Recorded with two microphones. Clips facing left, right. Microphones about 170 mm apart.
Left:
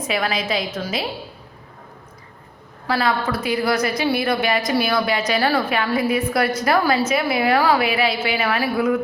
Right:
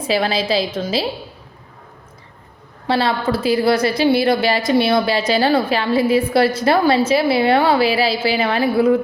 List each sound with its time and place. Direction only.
0.0 s a woman's voice: 30° right (ahead or behind)
2.8 s a woman's voice: 30° right (ahead or behind)